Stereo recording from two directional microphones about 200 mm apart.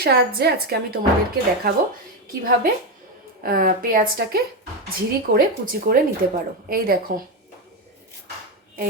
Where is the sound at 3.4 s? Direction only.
45° right (ahead or behind).